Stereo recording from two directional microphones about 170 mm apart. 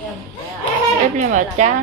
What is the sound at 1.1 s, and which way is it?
Speech, 45° right (ahead or behind).